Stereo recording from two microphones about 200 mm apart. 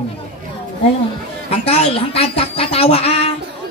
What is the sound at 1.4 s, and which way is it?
Speech, 30° left (ahead or behind).